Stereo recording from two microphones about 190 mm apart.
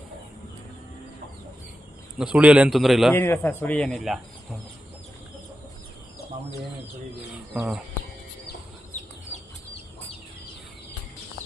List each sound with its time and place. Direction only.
2.1 s a man's voice: 5° right (ahead or behind)
3.2 s speech: 10° left (ahead or behind)
7.5 s speech: 5° right (ahead or behind)
9.0 s chicken: 35° left (ahead or behind)